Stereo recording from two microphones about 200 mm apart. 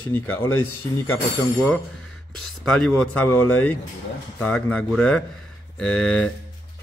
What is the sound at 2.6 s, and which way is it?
A man's voice, 5° left (ahead or behind).